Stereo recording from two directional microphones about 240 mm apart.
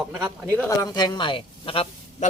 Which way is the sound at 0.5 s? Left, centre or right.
Centre.